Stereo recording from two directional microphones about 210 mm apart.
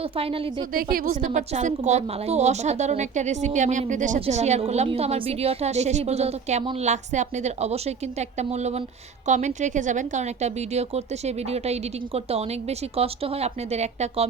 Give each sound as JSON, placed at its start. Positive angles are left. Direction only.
{"t": 0.0, "sound": "a woman's voice", "side_deg": -25}
{"t": 0.7, "sound": "a woman's voice", "side_deg": -45}